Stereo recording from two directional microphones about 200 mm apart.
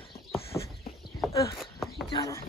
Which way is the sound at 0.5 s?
15° left (ahead or behind).